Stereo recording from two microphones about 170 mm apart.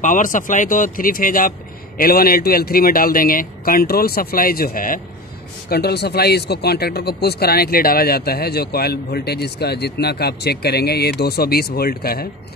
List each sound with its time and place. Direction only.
0.0 s a man's voice: 50° left (ahead or behind)
5.7 s speech: 70° left (ahead or behind)